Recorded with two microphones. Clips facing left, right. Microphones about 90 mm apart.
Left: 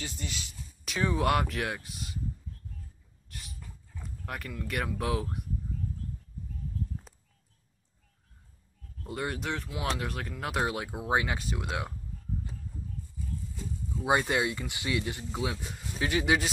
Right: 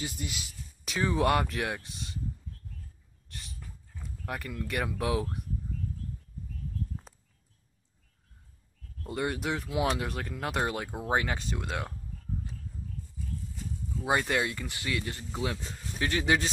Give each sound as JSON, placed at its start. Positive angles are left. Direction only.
{"t": 0.0, "sound": "speech", "side_deg": -10}
{"t": 3.3, "sound": "dog", "side_deg": 5}
{"t": 4.3, "sound": "speech", "side_deg": 0}
{"t": 9.0, "sound": "speech", "side_deg": 0}
{"t": 9.7, "sound": "speech", "side_deg": -15}
{"t": 9.9, "sound": "speech", "side_deg": 0}
{"t": 13.9, "sound": "speech", "side_deg": 15}